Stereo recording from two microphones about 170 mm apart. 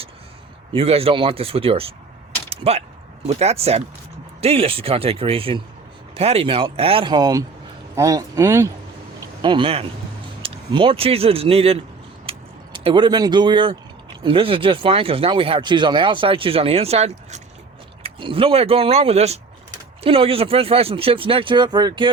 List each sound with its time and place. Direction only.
0.7 s a man's voice: 35° right (ahead or behind)
12.2 s vehicle: 30° right (ahead or behind)
14.3 s speech: 30° right (ahead or behind)